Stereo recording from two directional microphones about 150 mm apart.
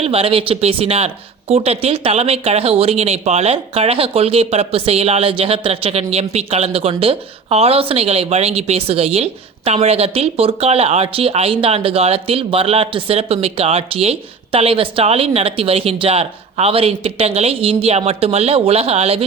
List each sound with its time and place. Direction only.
0.0 s speech: 40° right (ahead or behind)